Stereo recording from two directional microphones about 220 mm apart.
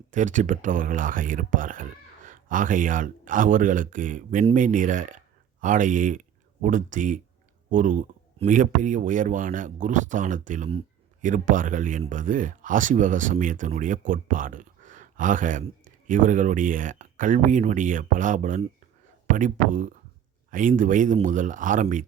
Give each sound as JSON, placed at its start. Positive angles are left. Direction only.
{"t": 0.1, "sound": "speech", "side_deg": -35}